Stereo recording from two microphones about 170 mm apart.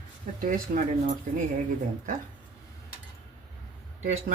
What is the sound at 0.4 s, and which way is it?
Speech, 50° right (ahead or behind).